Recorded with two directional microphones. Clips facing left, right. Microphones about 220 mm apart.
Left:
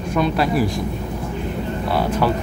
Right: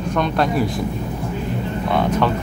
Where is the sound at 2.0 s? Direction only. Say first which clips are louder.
Right 1 dB; 10° left (ahead or behind).